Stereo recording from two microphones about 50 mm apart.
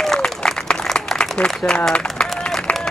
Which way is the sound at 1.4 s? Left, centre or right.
Left.